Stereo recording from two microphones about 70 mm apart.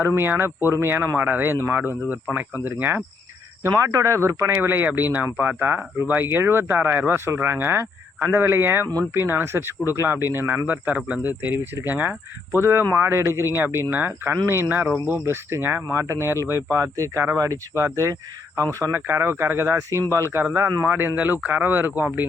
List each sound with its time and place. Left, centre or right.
0.0 s speech: right
3.6 s speech: right
10.7 s speech: right
12.5 s speech: right
14.7 s speech: right
15.0 s speech: right
18.9 s speech: right
19.7 s speech: right
20.6 s speech: right